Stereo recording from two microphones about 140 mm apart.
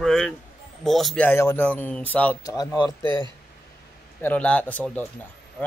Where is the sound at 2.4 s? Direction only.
25° left (ahead or behind).